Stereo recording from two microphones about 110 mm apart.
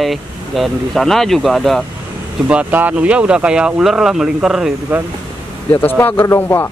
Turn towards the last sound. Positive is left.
turn(degrees=20)  # may be behind; listen again after turning